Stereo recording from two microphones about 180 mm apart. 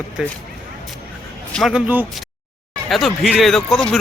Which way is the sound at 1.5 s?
5° right (ahead or behind).